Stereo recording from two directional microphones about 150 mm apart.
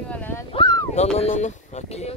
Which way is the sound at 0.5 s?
30° left (ahead or behind).